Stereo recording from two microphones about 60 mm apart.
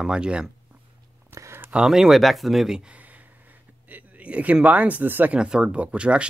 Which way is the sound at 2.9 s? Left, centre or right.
Right.